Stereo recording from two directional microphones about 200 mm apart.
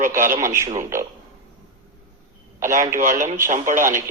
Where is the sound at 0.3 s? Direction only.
15° right (ahead or behind).